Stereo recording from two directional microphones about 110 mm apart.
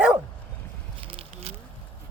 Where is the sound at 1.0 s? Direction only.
60° right (ahead or behind).